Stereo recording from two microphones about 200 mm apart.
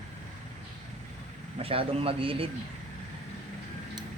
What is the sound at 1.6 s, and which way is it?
Speech, 30° right (ahead or behind).